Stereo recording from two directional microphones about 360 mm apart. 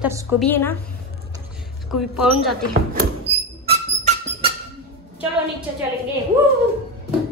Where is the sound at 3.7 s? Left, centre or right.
Centre.